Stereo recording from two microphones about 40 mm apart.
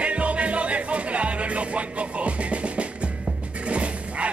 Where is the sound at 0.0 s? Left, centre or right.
Right.